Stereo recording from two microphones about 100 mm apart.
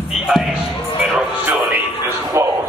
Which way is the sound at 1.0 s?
10° right (ahead or behind).